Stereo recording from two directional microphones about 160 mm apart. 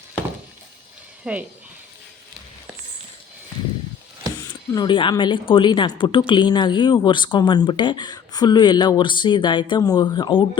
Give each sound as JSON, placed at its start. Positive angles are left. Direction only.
{"t": 1.2, "sound": "speech", "side_deg": -10}
{"t": 4.4, "sound": "speech", "side_deg": 25}